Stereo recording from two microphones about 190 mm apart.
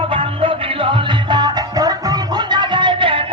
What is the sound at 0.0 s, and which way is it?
Music, 25° right (ahead or behind).